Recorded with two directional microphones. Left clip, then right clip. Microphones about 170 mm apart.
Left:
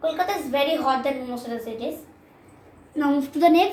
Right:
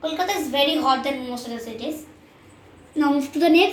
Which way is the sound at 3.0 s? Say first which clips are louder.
Right 1 dB; 10° left (ahead or behind).